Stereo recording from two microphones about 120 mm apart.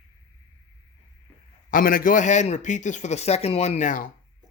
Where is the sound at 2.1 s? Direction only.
90° left.